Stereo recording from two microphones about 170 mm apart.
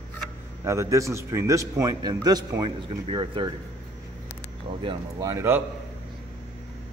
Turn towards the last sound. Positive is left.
turn(degrees=-15)  # may be behind; listen again after turning